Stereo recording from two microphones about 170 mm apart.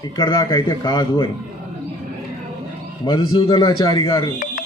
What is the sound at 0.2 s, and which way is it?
A man's voice, 25° left (ahead or behind).